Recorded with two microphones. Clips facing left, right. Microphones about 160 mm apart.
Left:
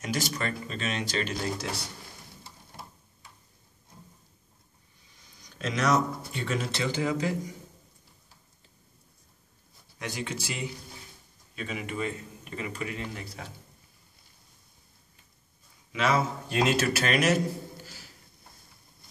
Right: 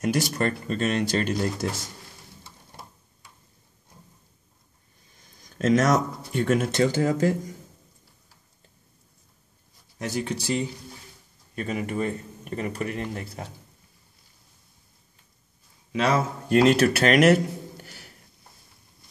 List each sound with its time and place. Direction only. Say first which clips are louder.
0.0 s speech: right 7 dB; 55° right (ahead or behind)
5.1 s speech: right 5 dB; 50° right (ahead or behind)
9.9 s speech: right 6 dB; 40° right (ahead or behind)
11.5 s speech: right 6 dB; 45° right (ahead or behind)
15.9 s speech: right 3 dB; 40° right (ahead or behind)
16.5 s a man's voice: right 8 dB; 60° right (ahead or behind)